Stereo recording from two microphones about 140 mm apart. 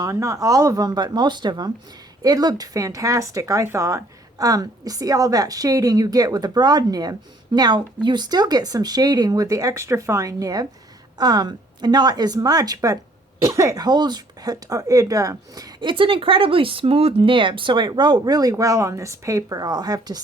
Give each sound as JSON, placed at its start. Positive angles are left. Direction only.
{"t": 0.0, "sound": "speech", "side_deg": -25}